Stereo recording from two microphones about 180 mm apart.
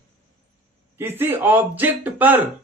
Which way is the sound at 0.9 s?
10° right (ahead or behind).